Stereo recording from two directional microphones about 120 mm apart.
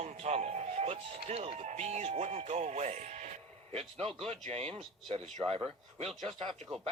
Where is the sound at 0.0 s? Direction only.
65° right (ahead or behind).